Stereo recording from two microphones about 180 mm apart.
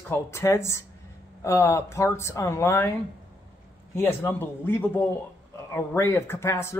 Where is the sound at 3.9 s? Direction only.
10° left (ahead or behind).